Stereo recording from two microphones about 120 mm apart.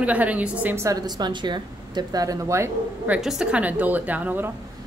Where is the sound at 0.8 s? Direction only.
35° right (ahead or behind).